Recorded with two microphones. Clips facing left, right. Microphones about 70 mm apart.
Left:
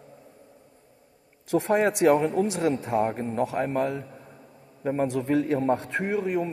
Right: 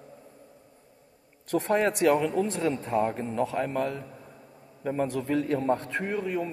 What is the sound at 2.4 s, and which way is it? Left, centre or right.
A man's voice, left.